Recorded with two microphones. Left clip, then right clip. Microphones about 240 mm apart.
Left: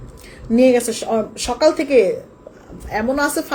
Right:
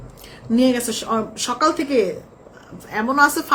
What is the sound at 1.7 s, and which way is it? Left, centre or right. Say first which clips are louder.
A woman's voice: left 5 dB; centre.